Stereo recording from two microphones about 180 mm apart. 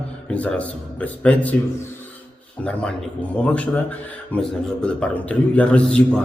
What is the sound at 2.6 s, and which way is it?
A man's voice, 10° left (ahead or behind).